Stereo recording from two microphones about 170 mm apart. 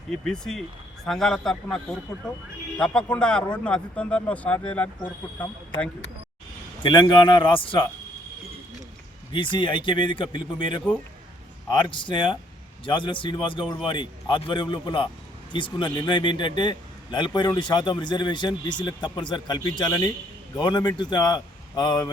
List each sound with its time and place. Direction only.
0.3 s a man's voice: 5° left (ahead or behind)
6.8 s a man's voice: 30° left (ahead or behind)
9.3 s a man's voice: 30° left (ahead or behind)
11.7 s a man's voice: 30° left (ahead or behind)